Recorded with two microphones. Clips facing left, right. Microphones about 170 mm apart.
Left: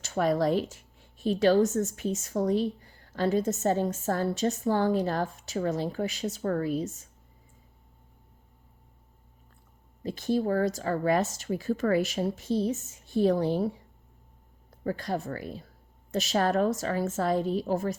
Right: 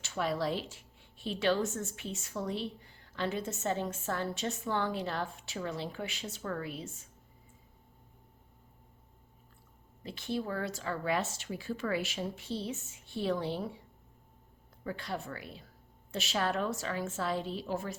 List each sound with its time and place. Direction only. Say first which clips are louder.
0.0 s a woman's voice: left 7 dB; 45° left (ahead or behind)
10.0 s a woman's voice: left 8 dB; 40° left (ahead or behind)